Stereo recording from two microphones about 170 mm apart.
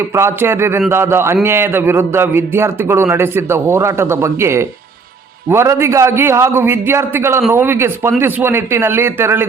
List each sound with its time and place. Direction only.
0.1 s a man's voice: 15° right (ahead or behind)